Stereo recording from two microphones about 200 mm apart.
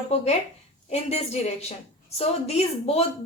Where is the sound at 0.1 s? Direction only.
30° left (ahead or behind).